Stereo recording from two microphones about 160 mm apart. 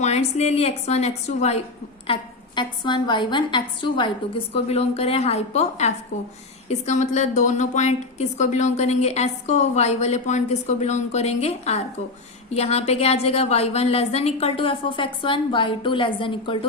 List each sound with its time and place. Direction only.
0.0 s a woman's voice: 45° left (ahead or behind)
2.6 s a woman's voice: 30° left (ahead or behind)